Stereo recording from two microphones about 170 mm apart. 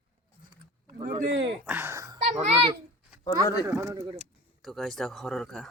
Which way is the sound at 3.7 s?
20° right (ahead or behind).